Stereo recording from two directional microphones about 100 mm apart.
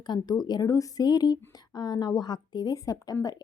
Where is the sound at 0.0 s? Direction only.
45° left (ahead or behind).